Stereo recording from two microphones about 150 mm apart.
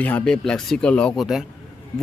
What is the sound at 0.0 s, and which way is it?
A man's voice, 10° left (ahead or behind).